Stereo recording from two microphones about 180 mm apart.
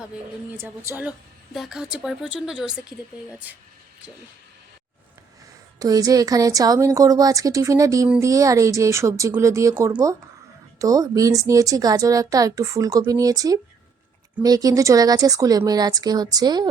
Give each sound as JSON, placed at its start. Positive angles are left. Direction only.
{"t": 0.9, "sound": "speech", "side_deg": -10}
{"t": 5.8, "sound": "speech", "side_deg": -20}